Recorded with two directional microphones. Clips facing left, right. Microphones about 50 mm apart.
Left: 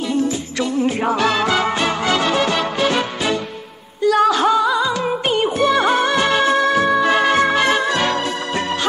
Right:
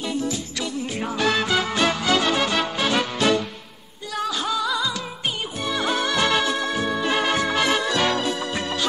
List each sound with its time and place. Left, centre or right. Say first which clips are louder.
0.6 s music: left 9 dB; left
1.1 s music: left 1 dB; left
1.7 s music: left 2 dB; left
2.0 s music: left 3 dB; left
4.0 s music: left 13 dB; left
4.5 s music: left 8 dB; left
5.0 s music: left 11 dB; left
5.9 s music: left 6 dB; left
6.5 s music: left 9 dB; left
7.2 s music: left 6 dB; left